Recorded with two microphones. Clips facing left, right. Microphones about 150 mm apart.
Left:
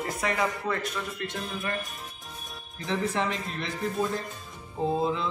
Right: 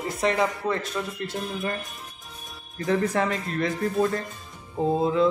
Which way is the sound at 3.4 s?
Centre (ahead or behind).